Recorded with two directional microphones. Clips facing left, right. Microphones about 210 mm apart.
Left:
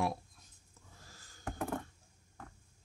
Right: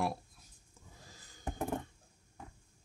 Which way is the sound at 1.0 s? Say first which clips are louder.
Right 1 dB; 15° right (ahead or behind).